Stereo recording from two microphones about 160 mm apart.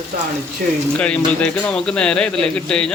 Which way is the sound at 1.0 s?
5° left (ahead or behind).